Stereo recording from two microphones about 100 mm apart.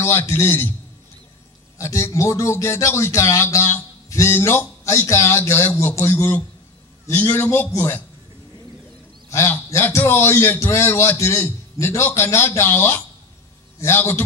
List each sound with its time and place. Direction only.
0.0 s speech: 25° left (ahead or behind)
1.8 s speech: 30° left (ahead or behind)
9.3 s speech: 30° left (ahead or behind)